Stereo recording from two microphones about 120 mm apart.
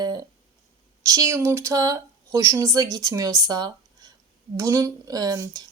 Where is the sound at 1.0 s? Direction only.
30° right (ahead or behind).